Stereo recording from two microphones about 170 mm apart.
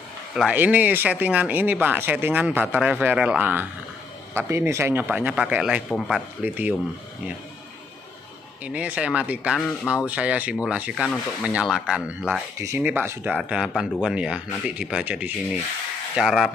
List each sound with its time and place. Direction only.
0.4 s speech: 5° right (ahead or behind)
6.4 s speech: 10° right (ahead or behind)
8.6 s speech: 5° right (ahead or behind)